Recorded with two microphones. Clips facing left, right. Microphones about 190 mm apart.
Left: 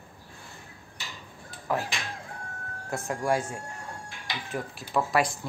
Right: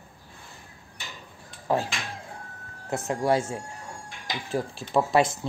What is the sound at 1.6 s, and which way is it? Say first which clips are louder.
Speech: right 4 dB; 30° right (ahead or behind).